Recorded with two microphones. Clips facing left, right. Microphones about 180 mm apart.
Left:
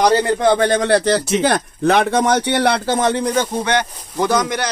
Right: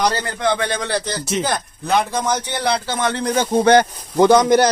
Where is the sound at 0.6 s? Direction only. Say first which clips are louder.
Left 8 dB; 55° left (ahead or behind).